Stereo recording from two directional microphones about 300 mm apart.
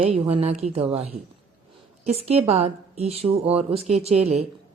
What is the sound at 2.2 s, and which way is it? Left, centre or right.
Speech, right.